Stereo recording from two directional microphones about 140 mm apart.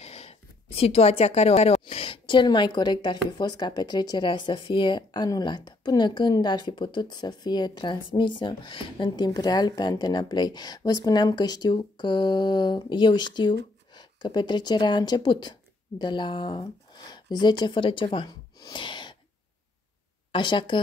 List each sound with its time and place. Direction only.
0.0 s speech: 45° left (ahead or behind)
20.3 s speech: 35° left (ahead or behind)